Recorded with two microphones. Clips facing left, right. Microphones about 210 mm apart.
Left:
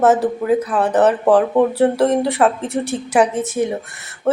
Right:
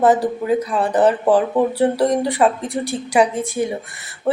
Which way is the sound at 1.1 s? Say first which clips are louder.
Left 2 dB; centre (ahead or behind).